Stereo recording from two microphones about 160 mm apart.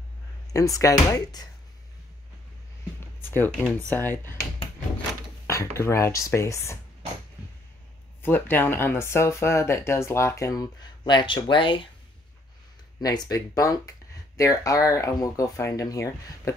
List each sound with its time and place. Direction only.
0.5 s speech: 20° left (ahead or behind)
3.0 s a sound: 15° left (ahead or behind)
3.9 s speech: 15° left (ahead or behind)
5.5 s speech: 15° left (ahead or behind)
8.2 s speech: 10° left (ahead or behind); by 11.9 s 30° left (ahead or behind)
13.0 s speech: 25° left (ahead or behind)